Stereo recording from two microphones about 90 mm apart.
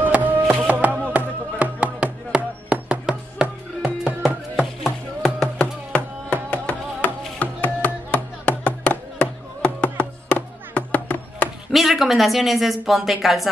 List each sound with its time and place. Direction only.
0.0 s music: 20° right (ahead or behind)
4.8 s a sound: 5° left (ahead or behind)
11.7 s speech: centre (ahead or behind)